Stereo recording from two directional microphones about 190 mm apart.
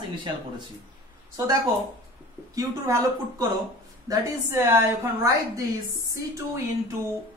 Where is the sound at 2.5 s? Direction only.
15° right (ahead or behind).